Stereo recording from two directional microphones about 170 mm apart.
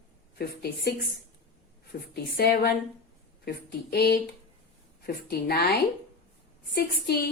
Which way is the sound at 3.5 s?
70° left (ahead or behind).